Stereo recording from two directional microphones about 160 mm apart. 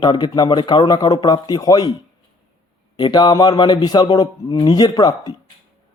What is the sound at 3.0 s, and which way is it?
Speech, 25° left (ahead or behind).